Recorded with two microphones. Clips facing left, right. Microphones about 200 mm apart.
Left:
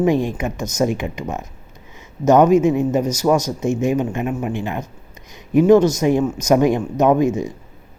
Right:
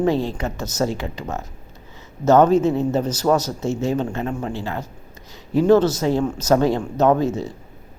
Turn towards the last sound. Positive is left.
turn(degrees=15)  # may be behind; listen again after turning